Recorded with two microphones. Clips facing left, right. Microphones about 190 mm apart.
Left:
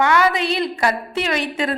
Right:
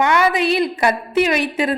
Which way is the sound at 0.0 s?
20° right (ahead or behind).